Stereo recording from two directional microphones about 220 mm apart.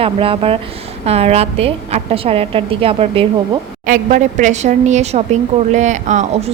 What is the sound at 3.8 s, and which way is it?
A woman's voice, 35° right (ahead or behind).